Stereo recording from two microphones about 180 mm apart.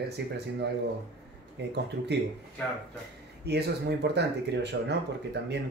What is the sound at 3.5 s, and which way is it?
Speech, 65° right (ahead or behind).